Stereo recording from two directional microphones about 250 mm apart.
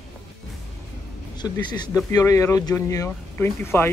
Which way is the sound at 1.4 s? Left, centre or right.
Centre.